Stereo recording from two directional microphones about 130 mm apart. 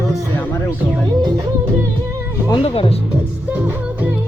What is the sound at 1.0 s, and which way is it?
Music, 30° right (ahead or behind).